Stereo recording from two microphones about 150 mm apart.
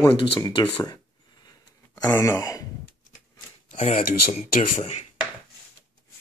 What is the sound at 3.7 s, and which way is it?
Speech, 45° left (ahead or behind).